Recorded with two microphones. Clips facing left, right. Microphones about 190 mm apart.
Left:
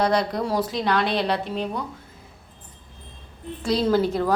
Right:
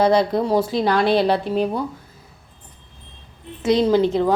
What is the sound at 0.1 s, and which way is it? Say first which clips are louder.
Speech: right 6 dB; 25° right (ahead or behind).